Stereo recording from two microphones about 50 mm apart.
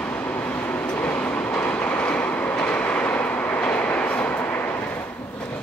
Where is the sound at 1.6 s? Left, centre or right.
Left.